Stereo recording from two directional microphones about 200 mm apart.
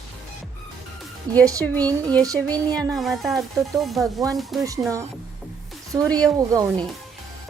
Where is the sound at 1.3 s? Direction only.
20° right (ahead or behind).